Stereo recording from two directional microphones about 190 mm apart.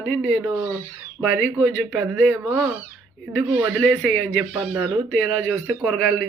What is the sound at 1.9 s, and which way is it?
Speech, 10° right (ahead or behind).